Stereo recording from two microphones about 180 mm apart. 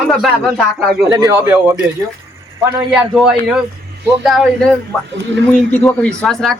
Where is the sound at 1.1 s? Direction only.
20° right (ahead or behind).